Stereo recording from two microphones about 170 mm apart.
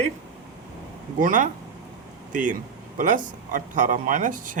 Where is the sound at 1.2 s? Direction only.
50° right (ahead or behind).